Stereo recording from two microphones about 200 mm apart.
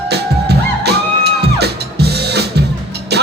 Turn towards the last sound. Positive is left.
turn(degrees=-55)  # may be behind; listen again after turning